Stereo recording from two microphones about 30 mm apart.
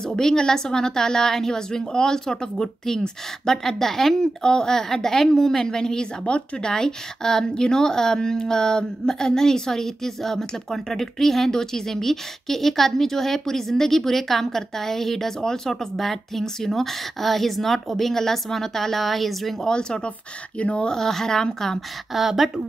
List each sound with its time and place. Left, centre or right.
0.0 s a woman's voice: centre
6.3 s speech: left
6.6 s a woman's voice: left; by 19.5 s centre
19.7 s a woman's voice: left
20.5 s speech: left
20.9 s speech: centre
22.1 s speech: centre